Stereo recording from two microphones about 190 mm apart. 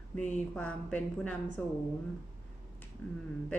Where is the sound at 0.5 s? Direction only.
5° left (ahead or behind).